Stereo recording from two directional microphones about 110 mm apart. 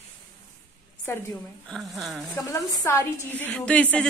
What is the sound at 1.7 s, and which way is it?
Speech, centre (ahead or behind).